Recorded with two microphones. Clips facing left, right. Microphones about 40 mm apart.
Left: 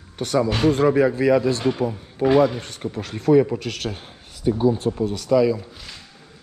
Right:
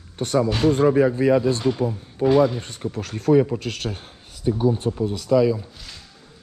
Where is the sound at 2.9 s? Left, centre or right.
Left.